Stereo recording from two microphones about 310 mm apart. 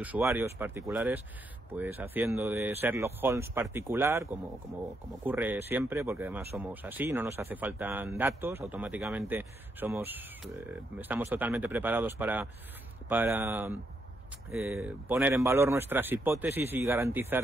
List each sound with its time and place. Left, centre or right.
0.0 s speech: centre